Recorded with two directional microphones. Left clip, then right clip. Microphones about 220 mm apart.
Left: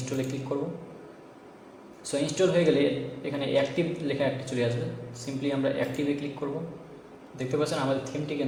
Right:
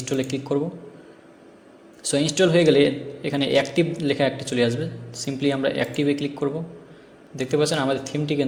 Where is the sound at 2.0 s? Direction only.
45° right (ahead or behind).